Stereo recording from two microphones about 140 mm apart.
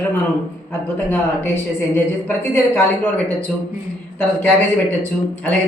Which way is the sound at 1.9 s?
15° left (ahead or behind).